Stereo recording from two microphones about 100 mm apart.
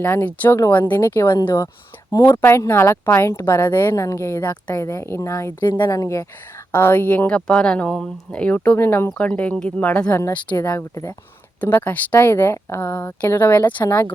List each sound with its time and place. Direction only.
0.0 s speech: 20° left (ahead or behind)
5.6 s speech: 50° left (ahead or behind)
5.9 s speech: 35° left (ahead or behind)
6.7 s speech: 25° left (ahead or behind)
10.6 s speech: 30° left (ahead or behind)
11.6 s speech: 20° left (ahead or behind)